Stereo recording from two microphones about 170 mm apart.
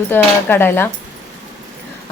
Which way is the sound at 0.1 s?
10° left (ahead or behind).